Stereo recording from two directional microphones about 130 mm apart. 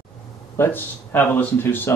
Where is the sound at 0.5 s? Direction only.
15° left (ahead or behind).